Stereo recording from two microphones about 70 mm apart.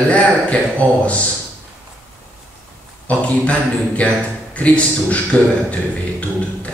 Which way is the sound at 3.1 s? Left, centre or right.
Centre.